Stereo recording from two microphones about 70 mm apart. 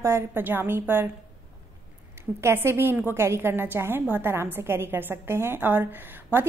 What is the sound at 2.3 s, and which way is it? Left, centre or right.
A woman's voice, right.